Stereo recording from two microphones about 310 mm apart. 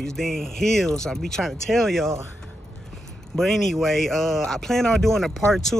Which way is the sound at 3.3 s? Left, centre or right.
Centre.